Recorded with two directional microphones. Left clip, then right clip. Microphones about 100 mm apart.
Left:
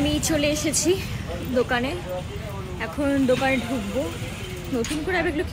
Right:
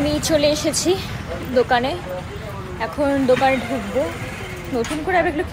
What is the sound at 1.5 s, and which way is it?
Speech, 35° left (ahead or behind).